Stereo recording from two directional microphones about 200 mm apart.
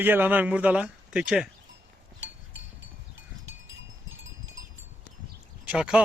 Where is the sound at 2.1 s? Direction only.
65° right (ahead or behind).